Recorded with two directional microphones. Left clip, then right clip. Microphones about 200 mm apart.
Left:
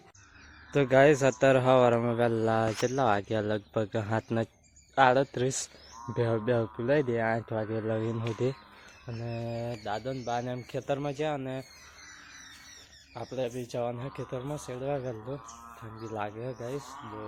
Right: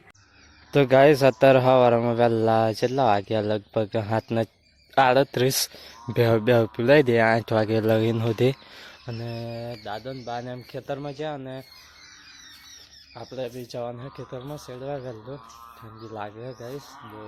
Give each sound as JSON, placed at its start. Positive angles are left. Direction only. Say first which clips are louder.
{"t": 0.7, "sound": "speech", "louder": "right 5 dB", "side_deg": -25}
{"t": 4.9, "sound": "speech", "louder": "right 5 dB", "side_deg": -35}
{"t": 9.3, "sound": "speech", "louder": "even", "side_deg": -20}
{"t": 9.6, "sound": "speech", "louder": "right 1 dB", "side_deg": 0}
{"t": 13.1, "sound": "speech", "louder": "right 1 dB", "side_deg": 0}